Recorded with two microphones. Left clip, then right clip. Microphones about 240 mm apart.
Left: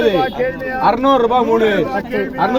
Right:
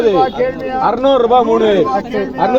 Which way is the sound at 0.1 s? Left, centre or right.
Left.